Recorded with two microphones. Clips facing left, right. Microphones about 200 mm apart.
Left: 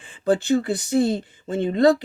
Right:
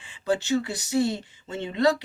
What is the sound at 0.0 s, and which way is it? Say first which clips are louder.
Speech: left 5 dB; 50° left (ahead or behind).